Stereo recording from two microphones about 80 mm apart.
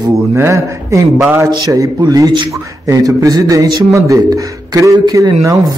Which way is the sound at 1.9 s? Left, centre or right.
Right.